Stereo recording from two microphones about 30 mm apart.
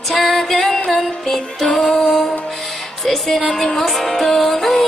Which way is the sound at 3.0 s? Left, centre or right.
Centre.